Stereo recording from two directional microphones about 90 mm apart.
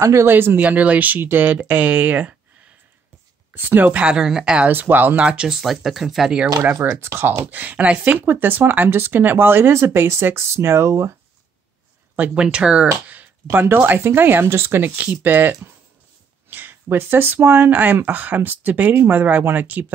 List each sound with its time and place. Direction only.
0.0 s speech: 30° right (ahead or behind)
3.5 s speech: 20° right (ahead or behind)
4.6 s speech: 20° right (ahead or behind)
6.6 s speech: 25° right (ahead or behind)
12.2 s speech: 10° right (ahead or behind)